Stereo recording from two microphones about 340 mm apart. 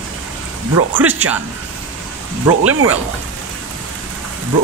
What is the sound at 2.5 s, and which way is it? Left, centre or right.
Speech, right.